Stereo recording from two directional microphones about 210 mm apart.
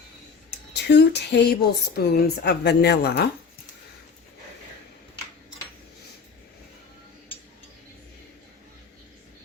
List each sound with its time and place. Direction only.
0.7 s speech: 55° left (ahead or behind)